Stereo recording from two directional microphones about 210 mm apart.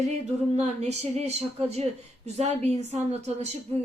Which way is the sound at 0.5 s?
30° right (ahead or behind).